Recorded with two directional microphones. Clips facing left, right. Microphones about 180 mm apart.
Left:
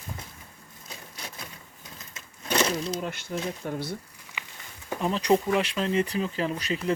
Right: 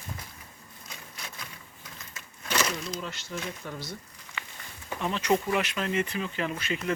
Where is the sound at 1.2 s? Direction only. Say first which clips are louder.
Left 3 dB; 35° left (ahead or behind).